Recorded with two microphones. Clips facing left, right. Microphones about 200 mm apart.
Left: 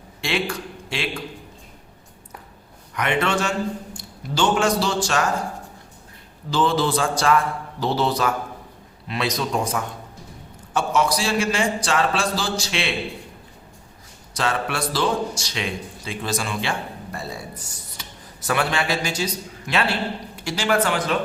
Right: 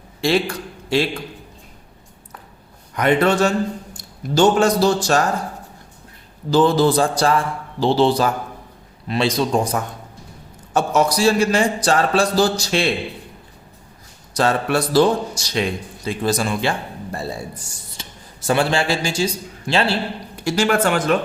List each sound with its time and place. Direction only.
0.2 s a man's voice: 40° right (ahead or behind)
2.9 s a man's voice: 35° right (ahead or behind)
6.5 s a man's voice: 40° right (ahead or behind)
14.3 s a man's voice: 40° right (ahead or behind)
18.0 s a sound: 25° right (ahead or behind)
18.4 s a man's voice: 30° right (ahead or behind)
20.4 s speech: 50° right (ahead or behind)